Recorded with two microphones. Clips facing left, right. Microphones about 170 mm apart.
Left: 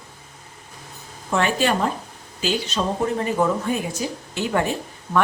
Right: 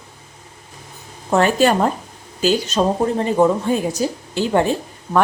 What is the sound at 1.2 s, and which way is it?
Speech, 40° right (ahead or behind).